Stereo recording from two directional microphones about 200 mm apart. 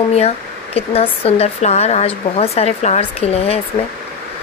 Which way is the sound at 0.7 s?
30° left (ahead or behind).